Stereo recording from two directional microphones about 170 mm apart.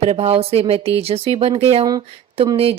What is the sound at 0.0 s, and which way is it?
Speech, 35° right (ahead or behind).